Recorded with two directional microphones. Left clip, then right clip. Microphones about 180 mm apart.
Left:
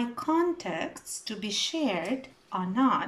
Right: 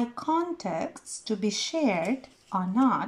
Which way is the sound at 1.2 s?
90° right.